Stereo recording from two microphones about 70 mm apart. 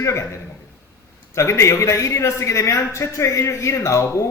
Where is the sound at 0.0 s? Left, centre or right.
Left.